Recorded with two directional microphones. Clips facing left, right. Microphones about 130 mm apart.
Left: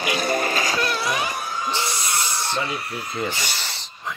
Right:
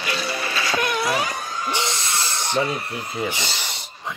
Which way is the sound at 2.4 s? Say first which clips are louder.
Right 3 dB; 20° right (ahead or behind).